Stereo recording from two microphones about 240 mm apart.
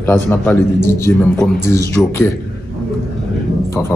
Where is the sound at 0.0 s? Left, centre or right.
Centre.